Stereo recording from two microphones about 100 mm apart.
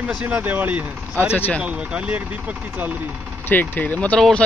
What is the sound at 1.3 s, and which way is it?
Speech, 20° left (ahead or behind).